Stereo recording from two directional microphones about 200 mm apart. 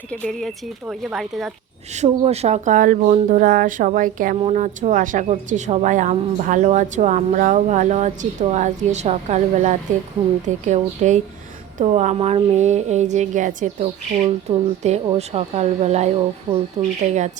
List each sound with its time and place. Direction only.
0.1 s speech: 5° left (ahead or behind)
1.9 s a woman's voice: 35° right (ahead or behind)
17.0 s a woman's voice: 35° right (ahead or behind)